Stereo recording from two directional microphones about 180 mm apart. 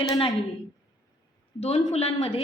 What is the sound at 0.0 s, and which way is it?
Speech, 20° left (ahead or behind).